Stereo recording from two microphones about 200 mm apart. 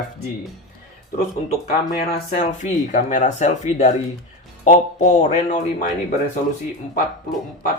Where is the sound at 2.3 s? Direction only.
40° left (ahead or behind).